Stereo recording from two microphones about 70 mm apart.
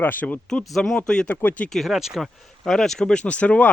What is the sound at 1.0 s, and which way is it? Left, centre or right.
Speech, centre.